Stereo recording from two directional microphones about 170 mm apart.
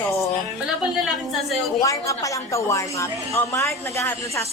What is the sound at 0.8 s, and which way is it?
Speech, 5° right (ahead or behind).